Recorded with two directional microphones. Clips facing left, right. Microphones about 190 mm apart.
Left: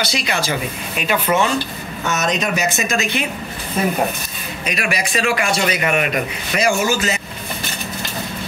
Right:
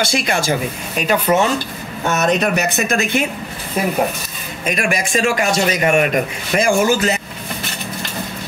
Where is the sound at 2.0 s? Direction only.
55° right (ahead or behind).